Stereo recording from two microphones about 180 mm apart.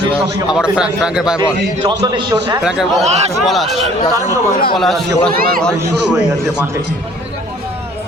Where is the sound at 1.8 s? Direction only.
25° right (ahead or behind).